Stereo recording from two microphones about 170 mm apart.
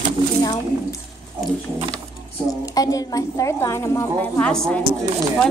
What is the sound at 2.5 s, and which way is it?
A woman's voice, 20° left (ahead or behind).